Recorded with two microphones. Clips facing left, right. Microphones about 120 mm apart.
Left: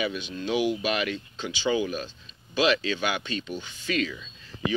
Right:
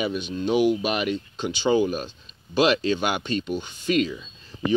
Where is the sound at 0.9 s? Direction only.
15° right (ahead or behind).